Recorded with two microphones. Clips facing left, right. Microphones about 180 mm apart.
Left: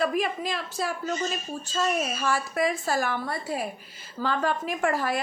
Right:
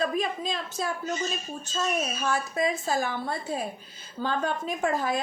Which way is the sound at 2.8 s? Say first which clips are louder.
Left 1 dB; 20° right (ahead or behind).